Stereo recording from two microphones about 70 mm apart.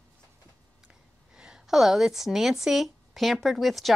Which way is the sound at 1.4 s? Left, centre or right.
Centre.